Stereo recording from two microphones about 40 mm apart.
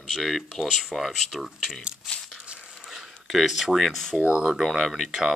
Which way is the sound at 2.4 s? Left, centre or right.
Right.